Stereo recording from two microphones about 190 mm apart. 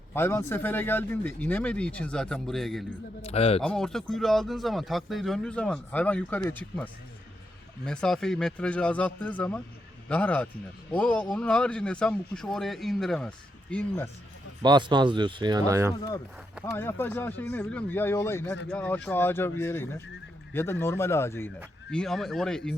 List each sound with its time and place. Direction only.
0.1 s speech: 15° left (ahead or behind)
3.2 s speech: 30° left (ahead or behind)
3.6 s speech: 5° left (ahead or behind)
14.6 s speech: 25° right (ahead or behind)
16.7 s speech: 10° left (ahead or behind)
21.9 s speech: centre (ahead or behind)